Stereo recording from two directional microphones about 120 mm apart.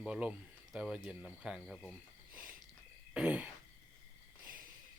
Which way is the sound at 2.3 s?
10° right (ahead or behind).